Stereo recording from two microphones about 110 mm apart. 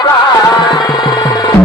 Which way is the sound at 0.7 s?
40° left (ahead or behind).